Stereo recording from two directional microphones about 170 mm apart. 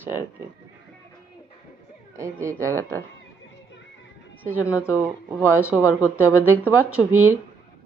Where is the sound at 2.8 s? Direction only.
15° left (ahead or behind).